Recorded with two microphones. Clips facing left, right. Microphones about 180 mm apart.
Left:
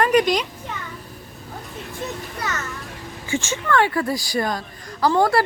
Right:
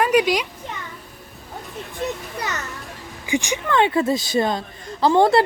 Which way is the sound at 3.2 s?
15° right (ahead or behind).